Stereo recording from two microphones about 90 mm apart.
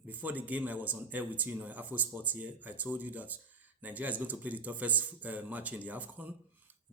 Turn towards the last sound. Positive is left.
turn(degrees=-20)  # may be behind; listen again after turning